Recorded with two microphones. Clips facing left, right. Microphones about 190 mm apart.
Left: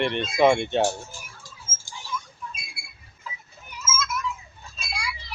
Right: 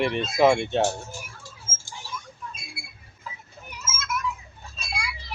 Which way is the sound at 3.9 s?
60° right (ahead or behind).